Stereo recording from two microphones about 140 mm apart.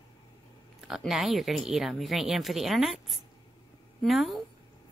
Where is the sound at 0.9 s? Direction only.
5° right (ahead or behind).